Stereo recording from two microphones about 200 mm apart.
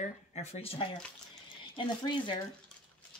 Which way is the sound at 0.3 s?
35° left (ahead or behind).